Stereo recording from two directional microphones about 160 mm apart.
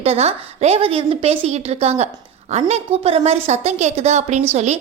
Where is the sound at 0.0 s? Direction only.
40° right (ahead or behind).